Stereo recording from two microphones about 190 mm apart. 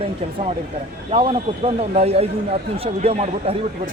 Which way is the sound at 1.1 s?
30° right (ahead or behind).